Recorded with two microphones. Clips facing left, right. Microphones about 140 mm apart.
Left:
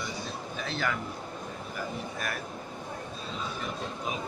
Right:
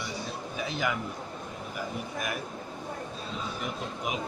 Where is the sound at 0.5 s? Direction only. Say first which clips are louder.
Right 1 dB; 10° right (ahead or behind).